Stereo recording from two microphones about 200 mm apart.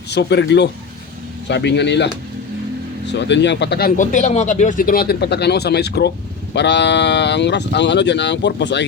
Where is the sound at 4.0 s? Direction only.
35° left (ahead or behind); by 8.8 s 60° left (ahead or behind).